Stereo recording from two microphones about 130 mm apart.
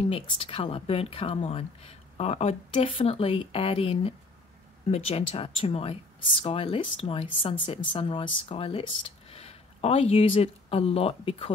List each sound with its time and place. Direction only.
0.0 s speech: 45° left (ahead or behind)